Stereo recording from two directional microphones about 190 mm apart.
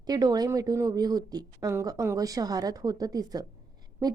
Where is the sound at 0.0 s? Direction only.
20° right (ahead or behind).